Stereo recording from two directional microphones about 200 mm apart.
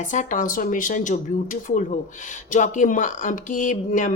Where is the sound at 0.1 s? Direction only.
40° left (ahead or behind).